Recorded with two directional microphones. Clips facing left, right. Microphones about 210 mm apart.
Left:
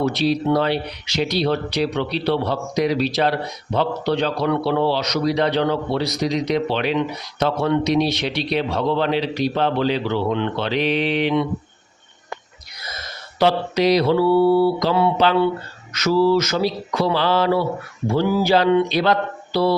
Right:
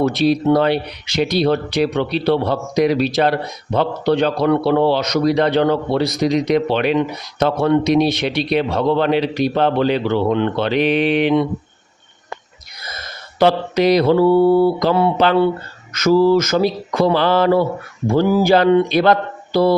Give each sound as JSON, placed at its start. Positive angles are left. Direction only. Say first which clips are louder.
{"t": 0.0, "sound": "a man's voice", "louder": "right 4 dB", "side_deg": -50}
{"t": 13.4, "sound": "a man's voice", "louder": "right 3 dB", "side_deg": -55}